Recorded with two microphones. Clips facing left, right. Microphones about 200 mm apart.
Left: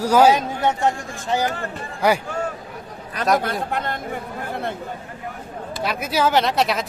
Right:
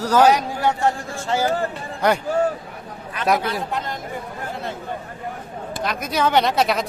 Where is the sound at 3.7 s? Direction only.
55° left (ahead or behind).